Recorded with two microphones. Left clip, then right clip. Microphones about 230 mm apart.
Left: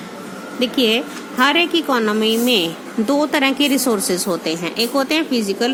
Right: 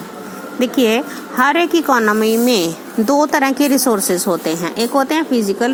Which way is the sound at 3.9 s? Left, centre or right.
Centre.